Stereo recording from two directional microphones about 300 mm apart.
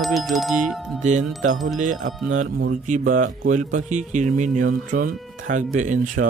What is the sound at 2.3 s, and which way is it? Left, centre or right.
Speech, right.